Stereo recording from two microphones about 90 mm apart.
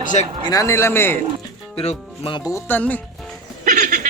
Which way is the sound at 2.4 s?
35° left (ahead or behind).